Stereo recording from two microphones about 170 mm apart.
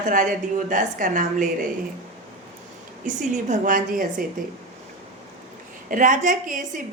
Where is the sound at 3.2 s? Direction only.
45° right (ahead or behind).